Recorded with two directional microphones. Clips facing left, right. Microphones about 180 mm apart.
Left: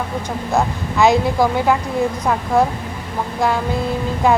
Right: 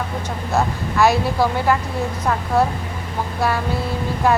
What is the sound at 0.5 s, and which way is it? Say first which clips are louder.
A woman's voice: left 1 dB; 15° left (ahead or behind).